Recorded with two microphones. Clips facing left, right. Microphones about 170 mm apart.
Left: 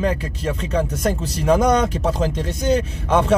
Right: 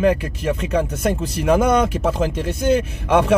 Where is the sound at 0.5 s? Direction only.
30° left (ahead or behind).